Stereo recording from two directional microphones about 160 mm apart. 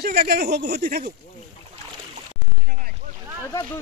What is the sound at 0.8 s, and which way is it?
Speech, 70° right (ahead or behind).